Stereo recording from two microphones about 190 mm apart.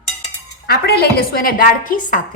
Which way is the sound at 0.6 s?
55° left (ahead or behind).